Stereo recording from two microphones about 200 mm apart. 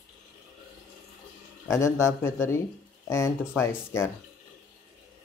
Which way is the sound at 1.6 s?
15° left (ahead or behind).